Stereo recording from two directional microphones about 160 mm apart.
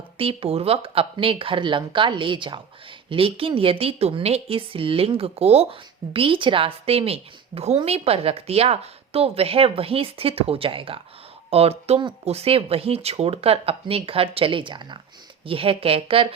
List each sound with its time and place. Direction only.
0.2 s a woman's voice: 35° right (ahead or behind)